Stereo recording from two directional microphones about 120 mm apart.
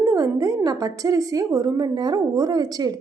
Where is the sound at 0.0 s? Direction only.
25° right (ahead or behind).